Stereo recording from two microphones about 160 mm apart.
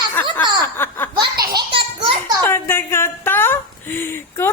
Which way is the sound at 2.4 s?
15° left (ahead or behind).